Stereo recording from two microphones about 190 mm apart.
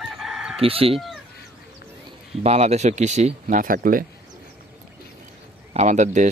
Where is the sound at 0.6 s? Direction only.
30° right (ahead or behind).